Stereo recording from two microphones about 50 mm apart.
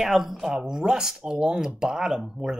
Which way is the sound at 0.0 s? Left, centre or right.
Centre.